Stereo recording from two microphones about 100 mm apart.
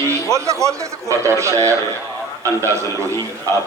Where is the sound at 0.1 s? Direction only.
30° right (ahead or behind).